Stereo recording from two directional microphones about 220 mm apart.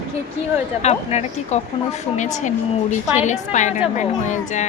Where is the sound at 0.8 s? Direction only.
30° left (ahead or behind).